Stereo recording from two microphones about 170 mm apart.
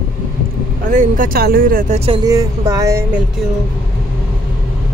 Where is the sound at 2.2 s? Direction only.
20° right (ahead or behind).